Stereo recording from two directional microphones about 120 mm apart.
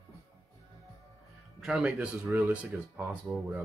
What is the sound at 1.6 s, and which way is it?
Speech, 5° right (ahead or behind).